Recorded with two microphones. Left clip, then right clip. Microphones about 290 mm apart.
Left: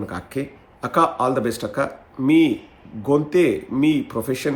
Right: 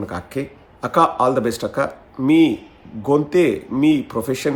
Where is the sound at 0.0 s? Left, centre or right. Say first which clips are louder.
Right 2 dB; centre.